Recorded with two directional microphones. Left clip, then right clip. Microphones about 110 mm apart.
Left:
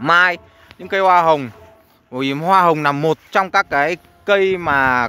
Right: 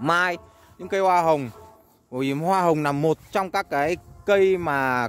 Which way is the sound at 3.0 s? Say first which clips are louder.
Left 6 dB; 20° right (ahead or behind).